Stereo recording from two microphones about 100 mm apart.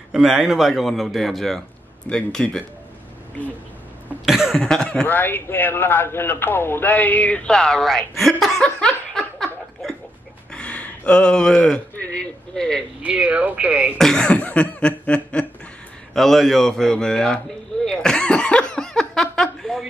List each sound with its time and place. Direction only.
0.1 s a man's voice: 5° right (ahead or behind)
4.3 s cough: centre (ahead or behind)
4.6 s a man's voice: 10° left (ahead or behind)
5.0 s a man's voice: 20° left (ahead or behind); by 9.9 s centre (ahead or behind)
10.5 s speech: 10° left (ahead or behind)
13.0 s speech: 10° right (ahead or behind)
13.9 s a man's voice: 5° left (ahead or behind)
17.8 s a sound: 5° left (ahead or behind)